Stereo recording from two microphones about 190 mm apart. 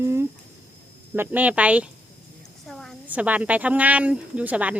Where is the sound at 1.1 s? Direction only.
10° right (ahead or behind).